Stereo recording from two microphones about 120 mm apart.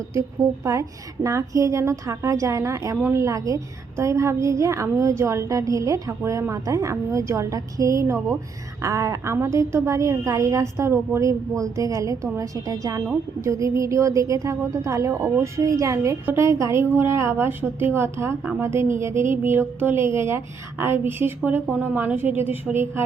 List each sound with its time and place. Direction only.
0.1 s a woman's voice: 25° right (ahead or behind)